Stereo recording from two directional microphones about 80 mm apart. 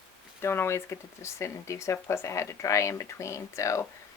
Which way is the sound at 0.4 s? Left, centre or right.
Left.